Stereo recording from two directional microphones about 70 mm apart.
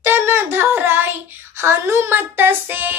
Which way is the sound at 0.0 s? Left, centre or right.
Right.